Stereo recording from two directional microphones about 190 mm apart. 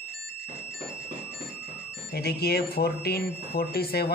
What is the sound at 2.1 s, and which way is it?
Speech, 55° left (ahead or behind).